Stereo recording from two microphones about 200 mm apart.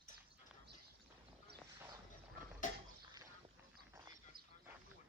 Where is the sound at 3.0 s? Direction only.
20° right (ahead or behind).